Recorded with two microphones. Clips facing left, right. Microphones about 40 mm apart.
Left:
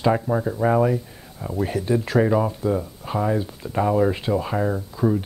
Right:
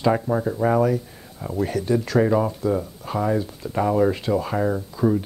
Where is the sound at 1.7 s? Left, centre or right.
Centre.